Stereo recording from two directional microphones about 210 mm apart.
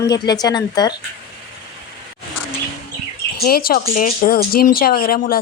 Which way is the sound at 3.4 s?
45° left (ahead or behind).